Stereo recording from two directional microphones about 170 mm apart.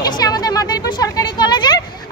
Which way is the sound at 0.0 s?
25° left (ahead or behind).